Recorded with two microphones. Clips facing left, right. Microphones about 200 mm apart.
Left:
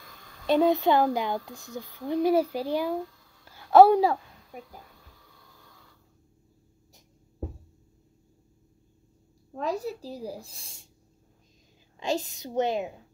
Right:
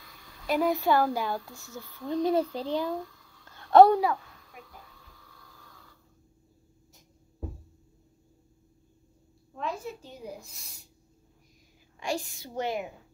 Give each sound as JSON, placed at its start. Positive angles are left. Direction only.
{"t": 0.5, "sound": "speech", "side_deg": 25}
{"t": 3.4, "sound": "a sound", "side_deg": 10}
{"t": 4.0, "sound": "babbling", "side_deg": 35}
{"t": 9.5, "sound": "speech", "side_deg": 40}
{"t": 12.0, "sound": "speech", "side_deg": 20}